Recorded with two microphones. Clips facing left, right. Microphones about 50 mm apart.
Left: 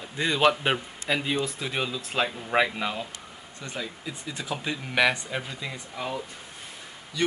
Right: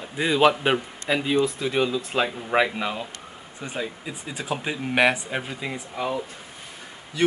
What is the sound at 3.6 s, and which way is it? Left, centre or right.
Speech, centre.